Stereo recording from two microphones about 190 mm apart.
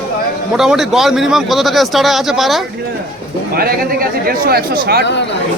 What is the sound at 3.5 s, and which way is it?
A man's voice, 50° right (ahead or behind).